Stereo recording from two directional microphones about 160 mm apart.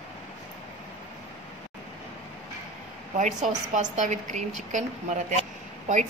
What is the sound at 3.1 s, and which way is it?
Speech, 50° right (ahead or behind).